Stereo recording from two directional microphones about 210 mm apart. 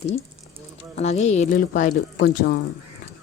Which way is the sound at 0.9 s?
30° left (ahead or behind).